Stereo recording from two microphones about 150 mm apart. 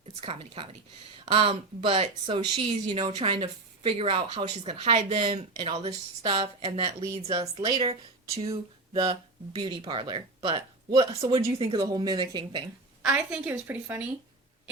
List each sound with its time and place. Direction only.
0.2 s speech: 40° right (ahead or behind)
7.3 s speech: 25° right (ahead or behind)
11.8 s speech: 25° right (ahead or behind)
13.0 s a woman's voice: 10° right (ahead or behind)